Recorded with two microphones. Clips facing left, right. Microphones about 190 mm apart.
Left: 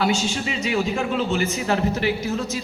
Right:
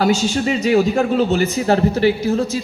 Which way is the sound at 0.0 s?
40° right (ahead or behind).